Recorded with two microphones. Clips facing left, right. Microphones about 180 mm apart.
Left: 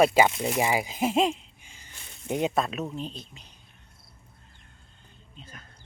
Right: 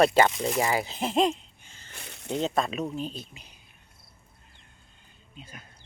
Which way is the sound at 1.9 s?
70° right (ahead or behind).